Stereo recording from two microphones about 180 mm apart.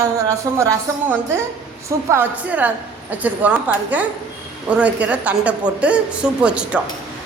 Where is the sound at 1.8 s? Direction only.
15° right (ahead or behind).